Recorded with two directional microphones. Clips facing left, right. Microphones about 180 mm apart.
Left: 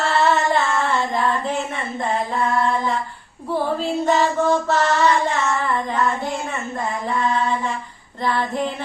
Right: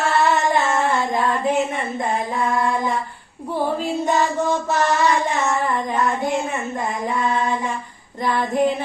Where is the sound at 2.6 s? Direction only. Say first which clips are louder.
Left 1 dB; 15° right (ahead or behind).